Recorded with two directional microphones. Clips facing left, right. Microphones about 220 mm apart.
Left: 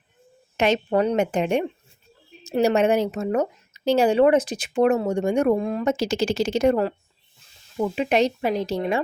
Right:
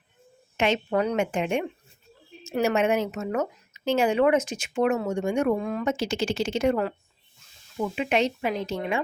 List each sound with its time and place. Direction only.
0.5 s speech: 40° left (ahead or behind)